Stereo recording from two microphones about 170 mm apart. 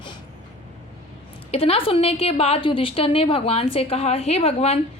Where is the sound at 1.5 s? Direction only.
35° left (ahead or behind).